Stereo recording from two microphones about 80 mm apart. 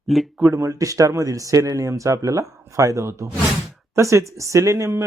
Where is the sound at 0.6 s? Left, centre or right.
Right.